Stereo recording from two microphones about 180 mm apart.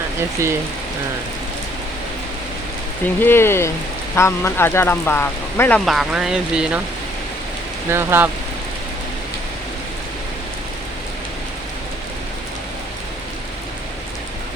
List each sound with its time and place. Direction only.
0.4 s speech: 15° right (ahead or behind)
3.2 s speech: 10° left (ahead or behind); by 6.8 s 5° right (ahead or behind)
7.9 s speech: 10° right (ahead or behind)